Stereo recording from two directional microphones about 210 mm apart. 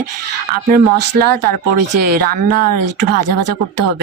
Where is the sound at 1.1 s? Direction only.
50° right (ahead or behind).